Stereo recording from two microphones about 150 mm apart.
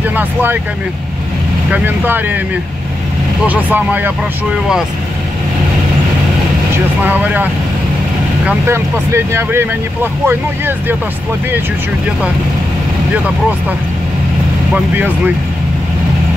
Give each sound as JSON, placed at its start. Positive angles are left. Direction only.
{"t": 0.1, "sound": "speech", "side_deg": -10}
{"t": 1.7, "sound": "speech", "side_deg": -15}
{"t": 3.4, "sound": "speech", "side_deg": -10}
{"t": 7.0, "sound": "speech", "side_deg": -10}
{"t": 8.5, "sound": "speech", "side_deg": -15}
{"t": 14.7, "sound": "speech", "side_deg": -10}